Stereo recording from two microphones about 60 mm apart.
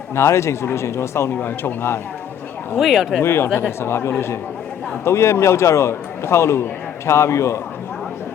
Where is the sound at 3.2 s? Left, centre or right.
Left.